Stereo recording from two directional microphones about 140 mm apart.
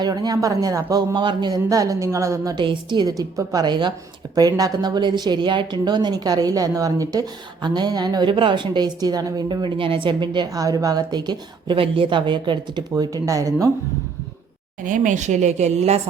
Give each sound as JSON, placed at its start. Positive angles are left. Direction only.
{"t": 0.0, "sound": "a man's voice", "side_deg": -25}
{"t": 14.8, "sound": "speech", "side_deg": -65}